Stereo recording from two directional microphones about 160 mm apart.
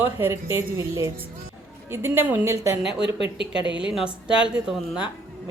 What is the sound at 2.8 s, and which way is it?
Speech, 90° right.